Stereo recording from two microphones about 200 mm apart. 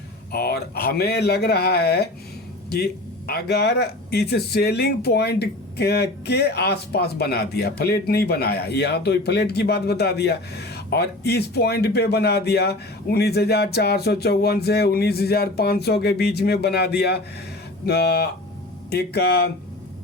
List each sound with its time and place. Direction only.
0.3 s speech: 50° left (ahead or behind)